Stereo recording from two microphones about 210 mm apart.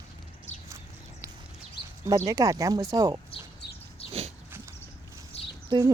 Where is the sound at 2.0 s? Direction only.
15° right (ahead or behind).